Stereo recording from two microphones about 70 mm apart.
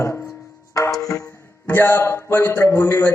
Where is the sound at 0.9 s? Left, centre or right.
Left.